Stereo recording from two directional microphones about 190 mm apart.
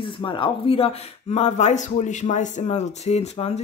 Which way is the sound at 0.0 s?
25° left (ahead or behind).